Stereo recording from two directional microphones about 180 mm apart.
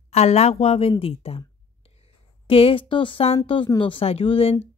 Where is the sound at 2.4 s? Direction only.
30° left (ahead or behind).